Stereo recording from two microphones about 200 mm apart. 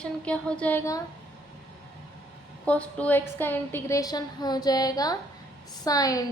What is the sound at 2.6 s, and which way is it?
A woman's voice, 5° left (ahead or behind).